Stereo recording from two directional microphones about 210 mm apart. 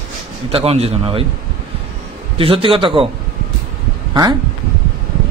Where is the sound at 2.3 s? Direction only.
25° right (ahead or behind).